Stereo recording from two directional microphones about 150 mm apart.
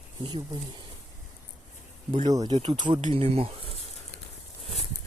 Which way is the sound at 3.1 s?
40° right (ahead or behind).